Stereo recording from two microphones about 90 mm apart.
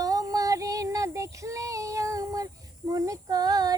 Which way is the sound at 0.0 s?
40° right (ahead or behind).